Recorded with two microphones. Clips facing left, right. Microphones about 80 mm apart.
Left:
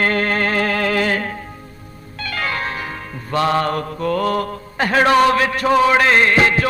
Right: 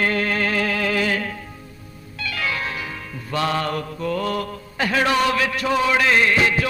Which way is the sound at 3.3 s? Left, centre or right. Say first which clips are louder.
Left 5 dB; left.